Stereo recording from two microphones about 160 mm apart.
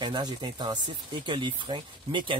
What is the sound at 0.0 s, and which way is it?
Speech, 25° right (ahead or behind).